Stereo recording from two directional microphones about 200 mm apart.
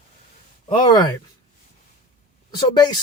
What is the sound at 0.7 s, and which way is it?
Speech, 20° left (ahead or behind).